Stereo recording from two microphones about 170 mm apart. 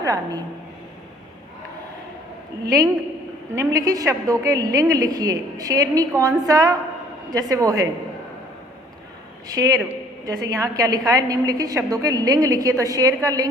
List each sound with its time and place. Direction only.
0.0 s a woman's voice: 20° right (ahead or behind)
3.5 s a woman's voice: 20° right (ahead or behind)
9.5 s a woman's voice: 20° right (ahead or behind)